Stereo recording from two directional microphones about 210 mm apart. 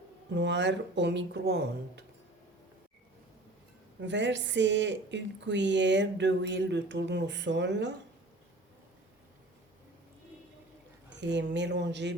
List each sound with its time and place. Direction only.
0.3 s speech: 55° right (ahead or behind)
4.0 s speech: 60° right (ahead or behind)
11.2 s speech: 55° right (ahead or behind)